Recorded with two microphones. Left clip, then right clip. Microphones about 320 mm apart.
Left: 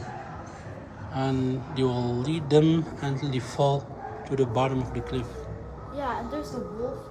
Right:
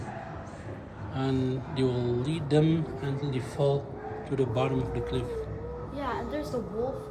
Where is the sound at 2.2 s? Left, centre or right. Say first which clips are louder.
Left 7 dB; left.